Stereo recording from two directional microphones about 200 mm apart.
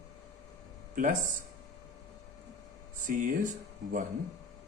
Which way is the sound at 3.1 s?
40° right (ahead or behind).